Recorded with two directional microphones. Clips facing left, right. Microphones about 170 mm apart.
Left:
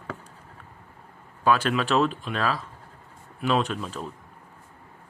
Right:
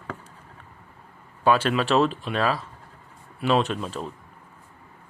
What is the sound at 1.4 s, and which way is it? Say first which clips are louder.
Speech: right 2 dB; 5° right (ahead or behind).